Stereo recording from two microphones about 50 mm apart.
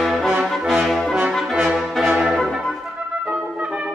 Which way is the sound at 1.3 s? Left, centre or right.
Centre.